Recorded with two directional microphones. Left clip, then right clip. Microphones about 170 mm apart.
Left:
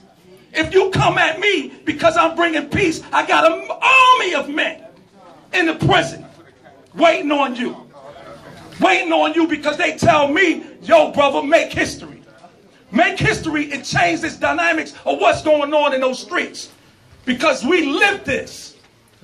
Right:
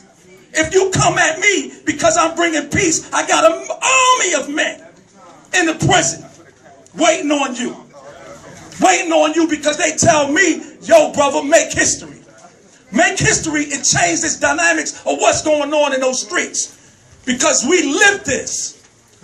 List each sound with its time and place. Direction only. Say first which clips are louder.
0.6 s a man's voice: right 1 dB; 45° right (ahead or behind)
8.7 s a man's voice: right 2 dB; 55° right (ahead or behind)